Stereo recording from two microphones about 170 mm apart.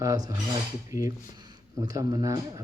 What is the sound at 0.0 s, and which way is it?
Speech, 20° right (ahead or behind).